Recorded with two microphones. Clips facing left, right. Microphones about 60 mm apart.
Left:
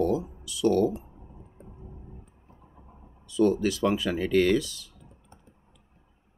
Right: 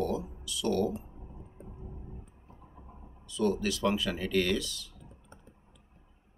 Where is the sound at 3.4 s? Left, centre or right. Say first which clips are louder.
Left 6 dB; centre.